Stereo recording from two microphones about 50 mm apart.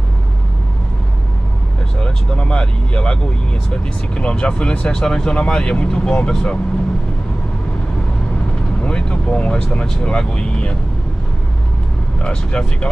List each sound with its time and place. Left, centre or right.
2.0 s speech: centre
8.8 s speech: left
12.2 s speech: centre